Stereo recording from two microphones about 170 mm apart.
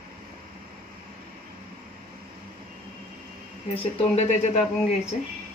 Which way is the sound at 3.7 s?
40° left (ahead or behind).